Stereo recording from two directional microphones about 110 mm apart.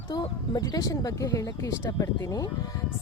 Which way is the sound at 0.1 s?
40° left (ahead or behind).